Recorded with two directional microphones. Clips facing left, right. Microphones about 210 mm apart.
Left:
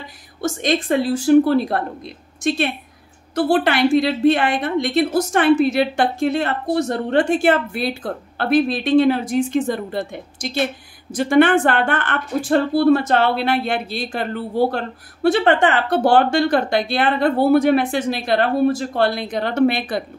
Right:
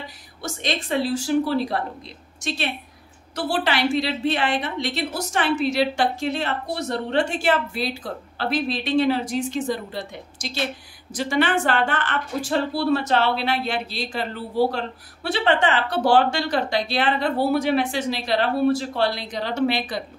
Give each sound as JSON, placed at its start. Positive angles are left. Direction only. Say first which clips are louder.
{"t": 0.4, "sound": "speech", "louder": "left 8 dB", "side_deg": 50}